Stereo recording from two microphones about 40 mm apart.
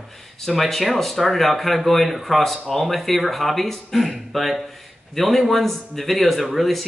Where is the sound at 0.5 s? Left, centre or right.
Centre.